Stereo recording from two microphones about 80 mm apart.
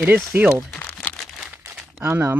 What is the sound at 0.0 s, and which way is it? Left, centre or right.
Speech, right.